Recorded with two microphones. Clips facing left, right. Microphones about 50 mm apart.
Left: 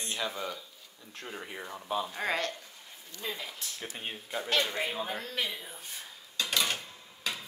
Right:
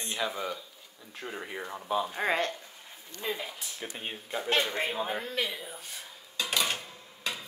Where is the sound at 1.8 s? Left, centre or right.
Centre.